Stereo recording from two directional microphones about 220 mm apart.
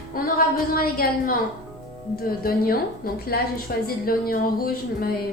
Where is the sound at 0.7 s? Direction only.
40° left (ahead or behind).